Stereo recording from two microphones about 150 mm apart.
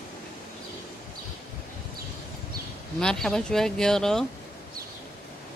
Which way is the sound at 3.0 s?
5° left (ahead or behind).